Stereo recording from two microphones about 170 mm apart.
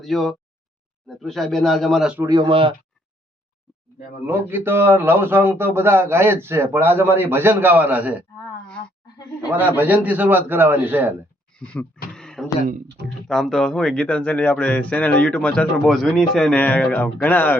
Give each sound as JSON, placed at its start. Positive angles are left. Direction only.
{"t": 0.0, "sound": "a man's voice", "side_deg": 0}
{"t": 2.2, "sound": "speech", "side_deg": -25}
{"t": 4.3, "sound": "a man's voice", "side_deg": -15}
{"t": 9.5, "sound": "a man's voice", "side_deg": -10}
{"t": 11.6, "sound": "a man's voice", "side_deg": 5}
{"t": 12.1, "sound": "a sound", "side_deg": 5}
{"t": 13.2, "sound": "a man's voice", "side_deg": 0}